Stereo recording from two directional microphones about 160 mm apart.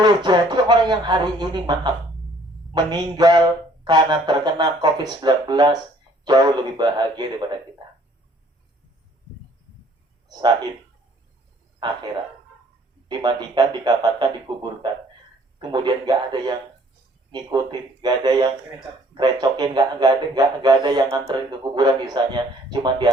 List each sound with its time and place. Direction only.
0.0 s a man's voice: 25° right (ahead or behind)
13.1 s a man's voice: 25° right (ahead or behind)